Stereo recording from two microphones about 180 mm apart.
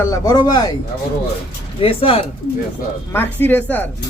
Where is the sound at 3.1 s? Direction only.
10° left (ahead or behind).